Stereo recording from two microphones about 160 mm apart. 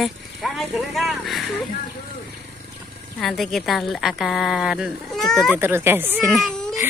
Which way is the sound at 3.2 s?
Centre (ahead or behind).